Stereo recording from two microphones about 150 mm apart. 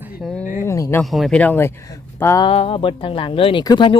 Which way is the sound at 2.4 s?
40° left (ahead or behind).